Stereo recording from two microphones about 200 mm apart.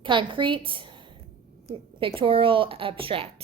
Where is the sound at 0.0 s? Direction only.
25° right (ahead or behind).